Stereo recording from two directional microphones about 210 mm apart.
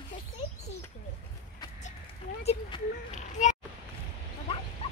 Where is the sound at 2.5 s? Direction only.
25° left (ahead or behind).